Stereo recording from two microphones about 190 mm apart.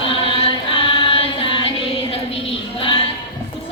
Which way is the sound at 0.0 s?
30° left (ahead or behind).